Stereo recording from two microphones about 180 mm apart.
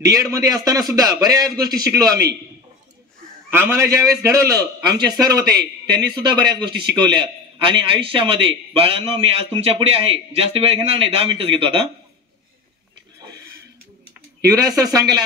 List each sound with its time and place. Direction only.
0.0 s a man's voice: 20° right (ahead or behind)
3.4 s a man's voice: 15° right (ahead or behind); by 11.8 s 30° right (ahead or behind)
14.5 s a man's voice: 20° right (ahead or behind)